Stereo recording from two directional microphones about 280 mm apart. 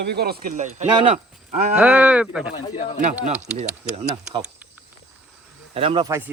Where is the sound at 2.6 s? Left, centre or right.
Left.